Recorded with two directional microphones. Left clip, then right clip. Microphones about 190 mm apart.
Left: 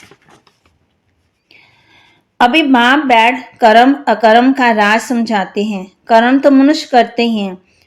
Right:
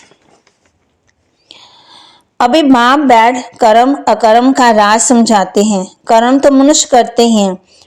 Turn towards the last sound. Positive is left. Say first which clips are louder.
# right 7 dB
turn(degrees=-35)  # may be behind; listen again after turning